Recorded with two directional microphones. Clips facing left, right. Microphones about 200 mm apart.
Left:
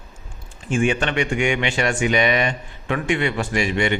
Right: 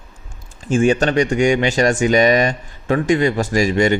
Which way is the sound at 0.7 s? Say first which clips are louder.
Right 5 dB; 40° right (ahead or behind).